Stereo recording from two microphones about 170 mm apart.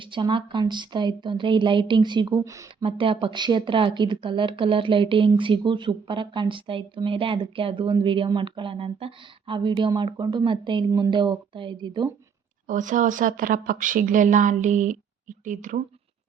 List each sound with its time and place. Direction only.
0.0 s speech: 30° right (ahead or behind)
2.8 s speech: 30° right (ahead or behind)
12.6 s speech: 50° right (ahead or behind)